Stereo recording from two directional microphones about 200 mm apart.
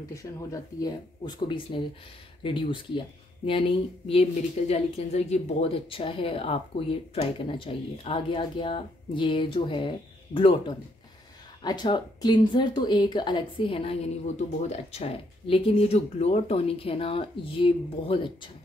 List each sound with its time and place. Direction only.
0.1 s speech: 15° left (ahead or behind)
4.1 s speech: 30° left (ahead or behind)
11.6 s speech: 20° left (ahead or behind)